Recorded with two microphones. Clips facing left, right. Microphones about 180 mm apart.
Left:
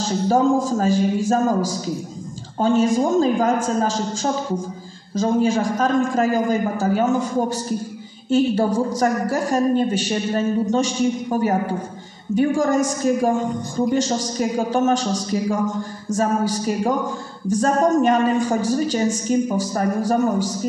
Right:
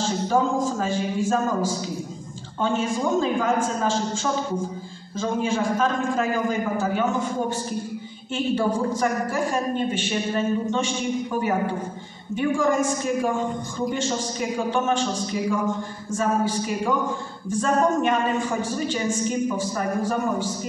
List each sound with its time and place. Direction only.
0.0 s a woman's voice: 40° left (ahead or behind)